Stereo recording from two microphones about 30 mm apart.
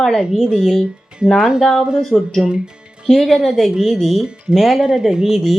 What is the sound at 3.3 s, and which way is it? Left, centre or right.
Speech, centre.